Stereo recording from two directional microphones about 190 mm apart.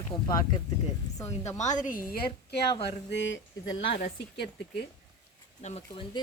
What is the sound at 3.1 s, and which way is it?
Speech, 75° left (ahead or behind).